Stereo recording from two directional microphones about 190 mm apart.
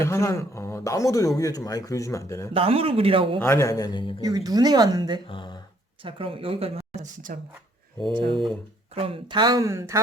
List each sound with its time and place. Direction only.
0.0 s a man's voice: 15° left (ahead or behind)
2.5 s speech: 30° right (ahead or behind)
3.4 s a man's voice: 15° left (ahead or behind)
4.2 s speech: 20° right (ahead or behind)
5.3 s a man's voice: 25° left (ahead or behind)
6.0 s speech: 25° right (ahead or behind); by 7.3 s 45° right (ahead or behind)
9.0 s speech: 30° right (ahead or behind)